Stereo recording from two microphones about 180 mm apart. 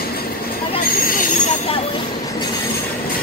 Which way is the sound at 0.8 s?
50° left (ahead or behind).